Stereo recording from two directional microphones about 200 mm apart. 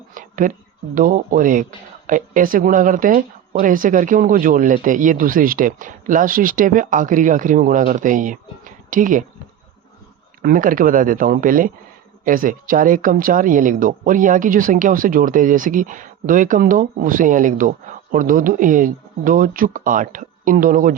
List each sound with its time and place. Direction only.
0.1 s a sound: 40° right (ahead or behind)
0.9 s speech: 45° right (ahead or behind)
10.4 s speech: 45° right (ahead or behind)